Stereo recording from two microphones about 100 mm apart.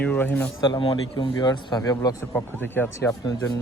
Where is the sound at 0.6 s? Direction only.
50° left (ahead or behind).